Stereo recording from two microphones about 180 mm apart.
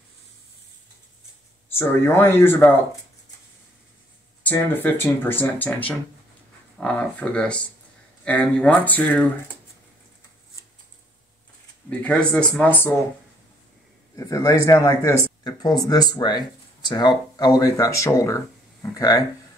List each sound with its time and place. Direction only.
1.7 s speech: 15° left (ahead or behind)
4.5 s speech: 10° left (ahead or behind)
11.9 s speech: 10° left (ahead or behind)
14.1 s speech: 20° left (ahead or behind)